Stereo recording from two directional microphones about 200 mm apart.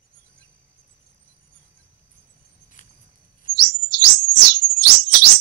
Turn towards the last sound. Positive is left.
turn(degrees=-50)  # may be behind; listen again after turning